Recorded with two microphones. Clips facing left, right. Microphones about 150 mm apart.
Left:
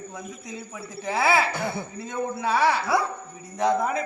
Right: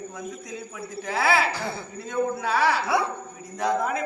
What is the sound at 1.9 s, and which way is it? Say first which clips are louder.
Speech: right 3 dB; 10° left (ahead or behind).